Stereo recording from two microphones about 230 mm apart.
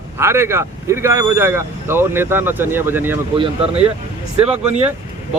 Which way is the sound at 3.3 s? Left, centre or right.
Right.